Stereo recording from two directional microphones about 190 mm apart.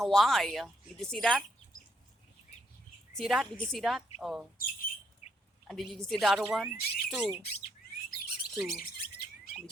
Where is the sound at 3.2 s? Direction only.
Centre (ahead or behind).